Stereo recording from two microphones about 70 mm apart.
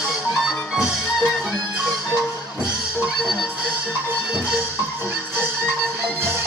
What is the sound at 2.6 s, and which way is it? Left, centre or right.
Music, centre.